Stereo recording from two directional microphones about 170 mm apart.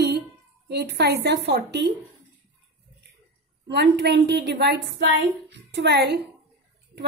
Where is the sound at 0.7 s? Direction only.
70° right (ahead or behind).